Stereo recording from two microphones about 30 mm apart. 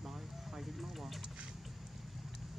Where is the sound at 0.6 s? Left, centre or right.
Centre.